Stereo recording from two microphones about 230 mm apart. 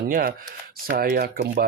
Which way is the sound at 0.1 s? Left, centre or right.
Right.